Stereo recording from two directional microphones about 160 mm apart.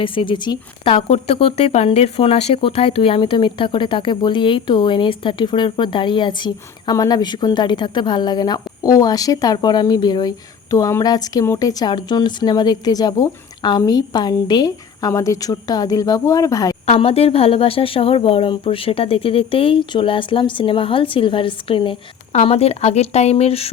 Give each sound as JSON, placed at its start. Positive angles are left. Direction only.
{"t": 0.0, "sound": "speech", "side_deg": 35}
{"t": 16.8, "sound": "speech", "side_deg": 40}